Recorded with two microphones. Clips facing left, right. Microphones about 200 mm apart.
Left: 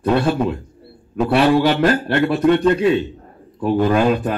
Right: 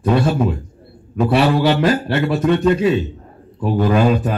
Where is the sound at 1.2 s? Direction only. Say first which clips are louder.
Left 1 dB; 5° right (ahead or behind).